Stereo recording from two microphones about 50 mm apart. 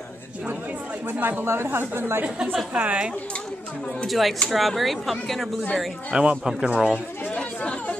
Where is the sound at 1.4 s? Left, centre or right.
Right.